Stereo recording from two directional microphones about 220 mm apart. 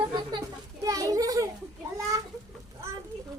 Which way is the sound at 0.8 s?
15° right (ahead or behind).